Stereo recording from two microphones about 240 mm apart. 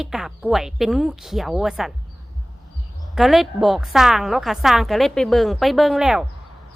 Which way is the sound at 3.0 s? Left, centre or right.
Centre.